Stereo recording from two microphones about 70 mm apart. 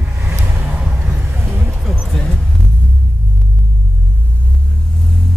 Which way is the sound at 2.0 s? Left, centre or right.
Centre.